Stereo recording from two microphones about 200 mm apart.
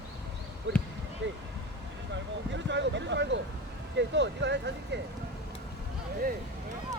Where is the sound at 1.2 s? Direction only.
65° right (ahead or behind).